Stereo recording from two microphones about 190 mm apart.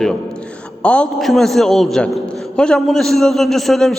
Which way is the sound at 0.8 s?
5° left (ahead or behind).